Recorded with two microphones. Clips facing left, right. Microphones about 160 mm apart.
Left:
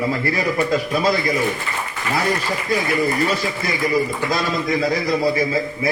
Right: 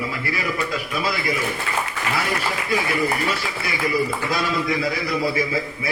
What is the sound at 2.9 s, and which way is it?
A man's voice, 40° left (ahead or behind).